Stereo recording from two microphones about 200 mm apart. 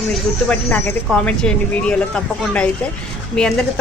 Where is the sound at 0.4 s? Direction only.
10° left (ahead or behind).